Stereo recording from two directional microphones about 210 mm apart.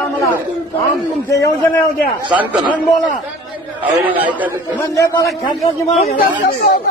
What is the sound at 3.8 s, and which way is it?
A man's voice, 5° right (ahead or behind).